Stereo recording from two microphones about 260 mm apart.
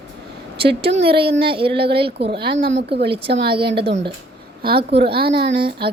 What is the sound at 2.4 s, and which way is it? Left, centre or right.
Speech, right.